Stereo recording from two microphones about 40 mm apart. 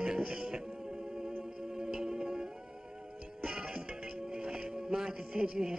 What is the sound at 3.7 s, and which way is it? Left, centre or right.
Music, right.